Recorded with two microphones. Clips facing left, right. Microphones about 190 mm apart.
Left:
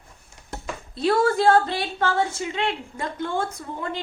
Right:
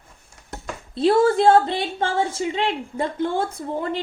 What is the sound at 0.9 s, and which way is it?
A woman's voice, 25° right (ahead or behind).